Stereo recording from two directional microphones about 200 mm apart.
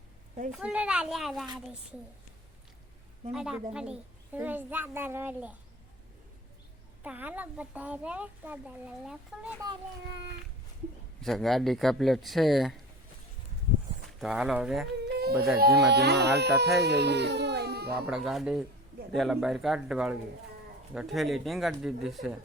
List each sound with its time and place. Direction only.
0.5 s speech: 5° right (ahead or behind)
3.3 s a child's voice: 5° right (ahead or behind)
7.0 s a child's voice: 5° right (ahead or behind)
9.6 s speech: 20° right (ahead or behind)
11.2 s speech: centre (ahead or behind)
14.2 s speech: 5° right (ahead or behind)
15.0 s baby cry: 55° right (ahead or behind)
15.5 s speech: 50° right (ahead or behind)
18.0 s speech: 5° right (ahead or behind)